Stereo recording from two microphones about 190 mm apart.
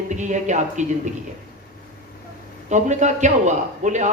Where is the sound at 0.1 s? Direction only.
40° right (ahead or behind).